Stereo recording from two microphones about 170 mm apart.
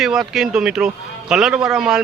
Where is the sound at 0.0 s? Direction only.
Centre (ahead or behind).